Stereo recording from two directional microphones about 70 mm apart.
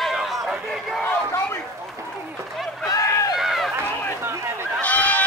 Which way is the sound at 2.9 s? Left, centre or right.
Left.